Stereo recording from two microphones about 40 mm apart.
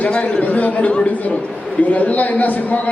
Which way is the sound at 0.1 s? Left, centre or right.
Left.